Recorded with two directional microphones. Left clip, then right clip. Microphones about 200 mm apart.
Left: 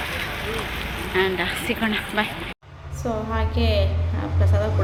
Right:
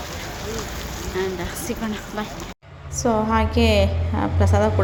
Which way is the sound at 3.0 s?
35° right (ahead or behind).